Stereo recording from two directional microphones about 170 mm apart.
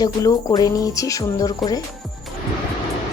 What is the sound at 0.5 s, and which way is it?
Speech, 20° left (ahead or behind).